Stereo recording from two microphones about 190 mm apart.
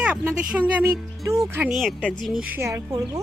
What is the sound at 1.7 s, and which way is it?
Speech, centre (ahead or behind).